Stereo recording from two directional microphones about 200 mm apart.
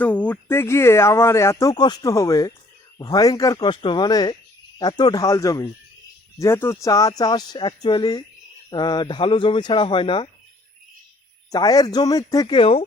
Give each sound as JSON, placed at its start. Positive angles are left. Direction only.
{"t": 0.0, "sound": "speech", "side_deg": 5}
{"t": 11.5, "sound": "speech", "side_deg": 20}